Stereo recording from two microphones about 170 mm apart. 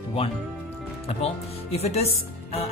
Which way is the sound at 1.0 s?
35° left (ahead or behind).